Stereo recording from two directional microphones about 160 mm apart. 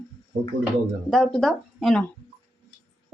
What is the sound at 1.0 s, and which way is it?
Speech, centre (ahead or behind).